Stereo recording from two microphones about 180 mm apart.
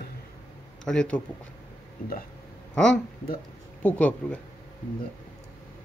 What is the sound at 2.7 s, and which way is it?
Speech, 5° left (ahead or behind).